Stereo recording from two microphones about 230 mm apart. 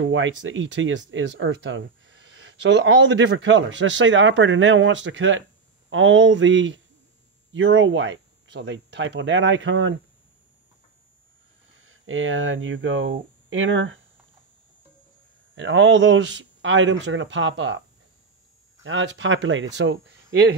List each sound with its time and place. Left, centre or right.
0.0 s speech: right
11.8 s speech: right
15.5 s speech: right
18.9 s speech: right